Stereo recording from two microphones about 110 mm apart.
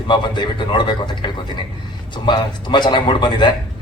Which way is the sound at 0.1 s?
45° left (ahead or behind).